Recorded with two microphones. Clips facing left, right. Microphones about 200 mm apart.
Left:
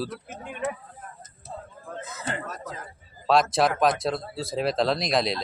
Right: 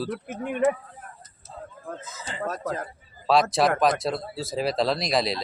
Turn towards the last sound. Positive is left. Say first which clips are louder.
# even
turn(degrees=0)  # may be behind; listen again after turning